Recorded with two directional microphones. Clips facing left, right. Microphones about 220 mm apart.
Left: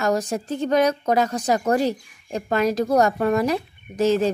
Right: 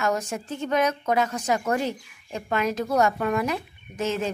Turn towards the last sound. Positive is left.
turn(degrees=35)  # may be behind; listen again after turning